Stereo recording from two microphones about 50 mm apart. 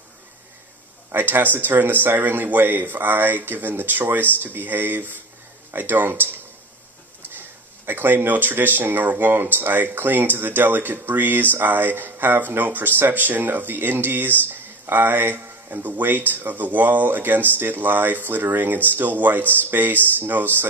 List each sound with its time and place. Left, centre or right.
1.1 s speech: right